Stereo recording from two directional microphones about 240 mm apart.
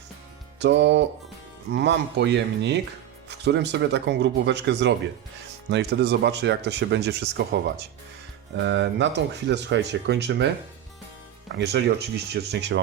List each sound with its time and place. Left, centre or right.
0.6 s speech: right
11.5 s speech: right